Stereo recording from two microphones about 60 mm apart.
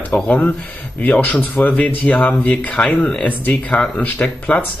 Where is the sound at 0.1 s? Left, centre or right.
Left.